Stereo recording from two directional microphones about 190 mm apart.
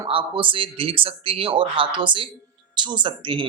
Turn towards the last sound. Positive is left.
turn(degrees=-25)  # may be behind; listen again after turning